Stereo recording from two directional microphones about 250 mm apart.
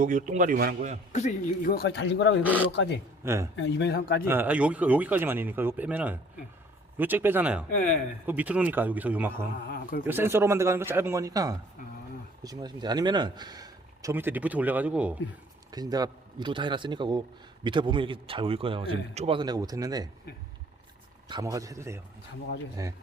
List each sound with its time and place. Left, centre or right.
0.0 s speech: right
1.1 s speech: left
3.2 s speech: centre
3.5 s speech: left
4.3 s speech: centre
9.6 s speech: left
10.1 s speech: centre
15.7 s a man's voice: centre
21.2 s speech: centre